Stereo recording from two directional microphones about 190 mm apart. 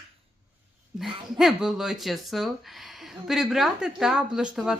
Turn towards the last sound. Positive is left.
turn(degrees=-5)  # may be behind; listen again after turning